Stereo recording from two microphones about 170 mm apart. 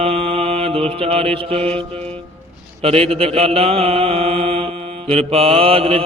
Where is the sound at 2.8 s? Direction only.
35° right (ahead or behind).